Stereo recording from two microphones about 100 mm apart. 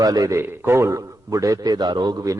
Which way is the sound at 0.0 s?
35° right (ahead or behind).